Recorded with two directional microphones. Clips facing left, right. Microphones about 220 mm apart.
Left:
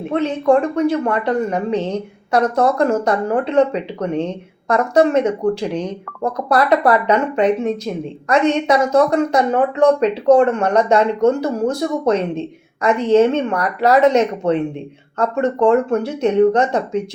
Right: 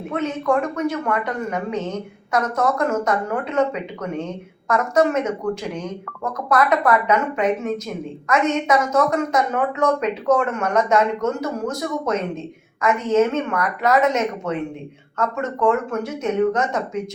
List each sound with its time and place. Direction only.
0.1 s speech: 30° left (ahead or behind)